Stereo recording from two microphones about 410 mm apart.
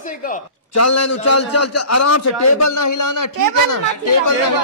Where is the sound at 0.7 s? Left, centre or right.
Left.